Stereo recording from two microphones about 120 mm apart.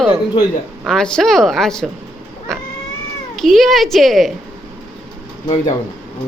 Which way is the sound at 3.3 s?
Centre (ahead or behind).